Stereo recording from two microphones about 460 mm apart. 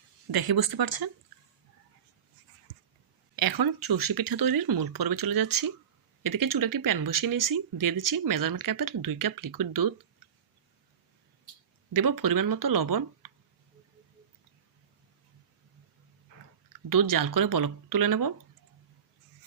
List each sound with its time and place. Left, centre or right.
0.3 s speech: right
3.3 s speech: right
11.9 s speech: right
16.9 s speech: right